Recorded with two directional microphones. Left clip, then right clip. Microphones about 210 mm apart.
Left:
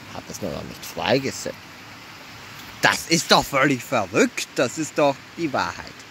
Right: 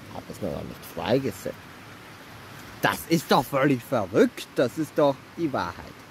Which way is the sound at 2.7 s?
5° right (ahead or behind).